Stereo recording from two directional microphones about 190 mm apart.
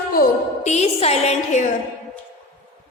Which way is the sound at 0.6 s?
35° left (ahead or behind).